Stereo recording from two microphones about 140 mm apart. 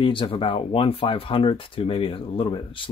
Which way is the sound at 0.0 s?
35° left (ahead or behind).